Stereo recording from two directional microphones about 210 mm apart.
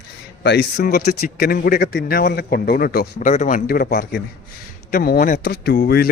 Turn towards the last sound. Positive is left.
turn(degrees=45)  # may be behind; listen again after turning